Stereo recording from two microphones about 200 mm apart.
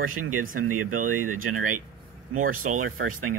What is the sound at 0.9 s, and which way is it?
Speech, 40° right (ahead or behind).